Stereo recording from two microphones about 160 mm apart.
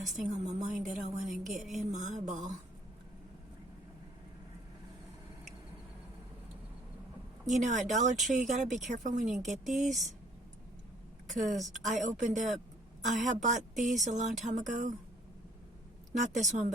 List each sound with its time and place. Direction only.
0.2 s speech: 50° right (ahead or behind)
0.9 s a woman's voice: centre (ahead or behind)
1.9 s speech: 50° right (ahead or behind)
7.4 s speech: 50° right (ahead or behind)
9.3 s a woman's voice: centre (ahead or behind)
11.5 s speech: 50° right (ahead or behind)
16.2 s speech: 50° right (ahead or behind)